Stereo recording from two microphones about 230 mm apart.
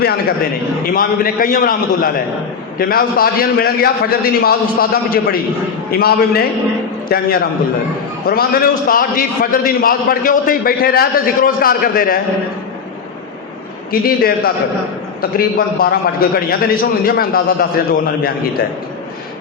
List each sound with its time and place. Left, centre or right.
0.0 s a man's voice: left
14.2 s a man's voice: left